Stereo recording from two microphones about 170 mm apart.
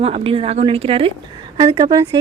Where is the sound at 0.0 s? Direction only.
35° right (ahead or behind).